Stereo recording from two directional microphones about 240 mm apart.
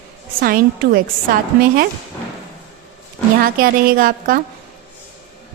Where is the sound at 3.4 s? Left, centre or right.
Right.